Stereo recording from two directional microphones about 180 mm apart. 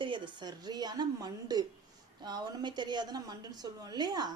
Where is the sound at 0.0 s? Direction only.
25° right (ahead or behind).